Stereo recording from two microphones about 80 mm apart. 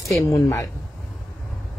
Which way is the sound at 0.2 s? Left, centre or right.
Left.